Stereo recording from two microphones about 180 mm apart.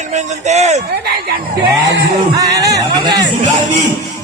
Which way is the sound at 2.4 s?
20° right (ahead or behind).